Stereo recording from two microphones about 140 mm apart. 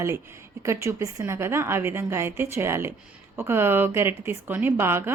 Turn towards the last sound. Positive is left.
turn(degrees=-15)  # may be behind; listen again after turning